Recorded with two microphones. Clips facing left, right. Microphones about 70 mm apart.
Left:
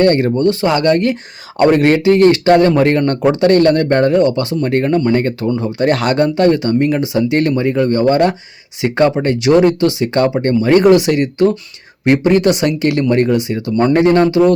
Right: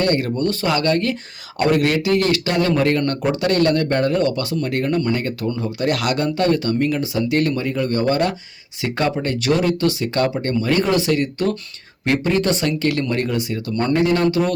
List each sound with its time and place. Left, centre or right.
0.2 s speech: left
4.1 s speech: left
4.6 s speech: left
5.4 s speech: left
5.6 s speech: left
13.9 s speech: left
14.3 s speech: left